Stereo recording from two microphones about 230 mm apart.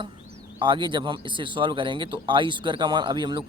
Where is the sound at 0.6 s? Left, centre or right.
Right.